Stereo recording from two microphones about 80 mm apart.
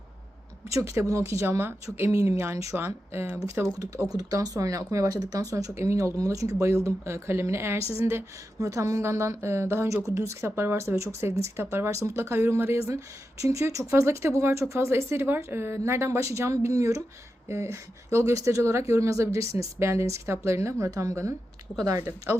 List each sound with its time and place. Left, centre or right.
0.7 s speech: right
2.0 s speech: right
2.7 s speech: right
4.2 s speech: right